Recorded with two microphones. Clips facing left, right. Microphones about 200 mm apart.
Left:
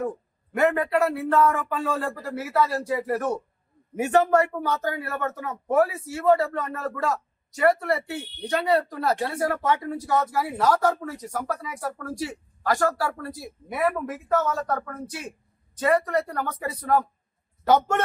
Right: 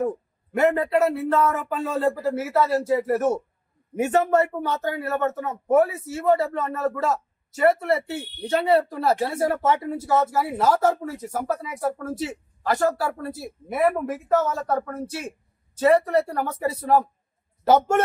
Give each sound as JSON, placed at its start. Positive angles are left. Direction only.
{"t": 0.5, "sound": "a man's voice", "side_deg": -25}
{"t": 4.4, "sound": "a man's voice", "side_deg": -25}